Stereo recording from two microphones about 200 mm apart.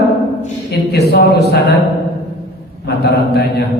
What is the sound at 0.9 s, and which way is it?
Speech, 55° left (ahead or behind).